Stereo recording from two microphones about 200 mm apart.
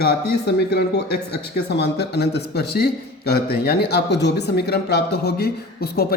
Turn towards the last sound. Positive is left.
turn(degrees=50)  # may be behind; listen again after turning